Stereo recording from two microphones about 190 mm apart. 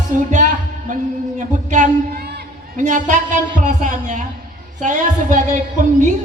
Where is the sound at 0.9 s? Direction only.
40° right (ahead or behind).